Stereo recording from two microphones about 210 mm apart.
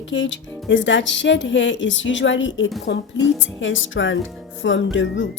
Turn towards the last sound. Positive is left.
turn(degrees=60)  # may be behind; listen again after turning